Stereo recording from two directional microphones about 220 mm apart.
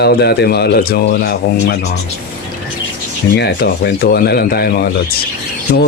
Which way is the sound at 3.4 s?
50° left (ahead or behind).